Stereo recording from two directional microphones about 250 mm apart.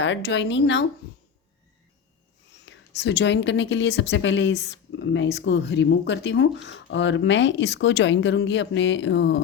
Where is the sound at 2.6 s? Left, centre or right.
Left.